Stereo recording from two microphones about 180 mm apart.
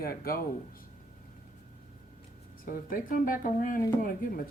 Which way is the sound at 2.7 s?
50° left (ahead or behind).